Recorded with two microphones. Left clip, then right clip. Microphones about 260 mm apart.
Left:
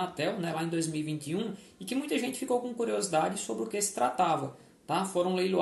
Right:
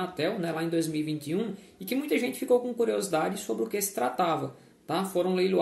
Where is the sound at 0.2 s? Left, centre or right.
Centre.